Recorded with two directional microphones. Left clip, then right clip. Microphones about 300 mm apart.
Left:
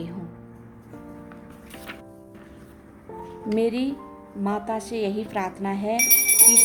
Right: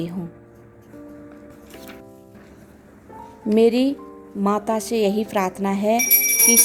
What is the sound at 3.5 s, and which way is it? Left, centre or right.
Speech, right.